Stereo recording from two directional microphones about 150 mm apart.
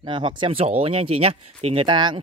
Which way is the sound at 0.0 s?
35° right (ahead or behind).